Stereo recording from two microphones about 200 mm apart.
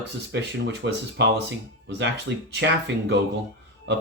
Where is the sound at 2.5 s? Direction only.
60° right (ahead or behind).